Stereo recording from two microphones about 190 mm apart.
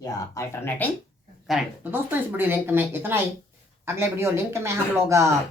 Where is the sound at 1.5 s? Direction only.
Centre (ahead or behind).